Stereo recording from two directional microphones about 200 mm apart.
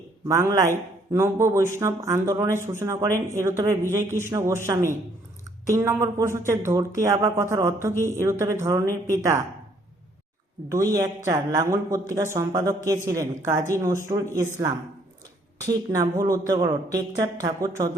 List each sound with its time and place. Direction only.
0.3 s speech: 15° right (ahead or behind)
10.7 s speech: 15° right (ahead or behind)
15.6 s speech: 15° right (ahead or behind)